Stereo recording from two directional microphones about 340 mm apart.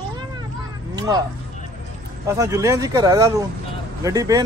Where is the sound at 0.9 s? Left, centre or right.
Centre.